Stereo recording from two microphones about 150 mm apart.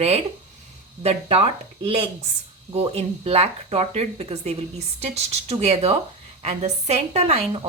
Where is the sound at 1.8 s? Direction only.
40° right (ahead or behind).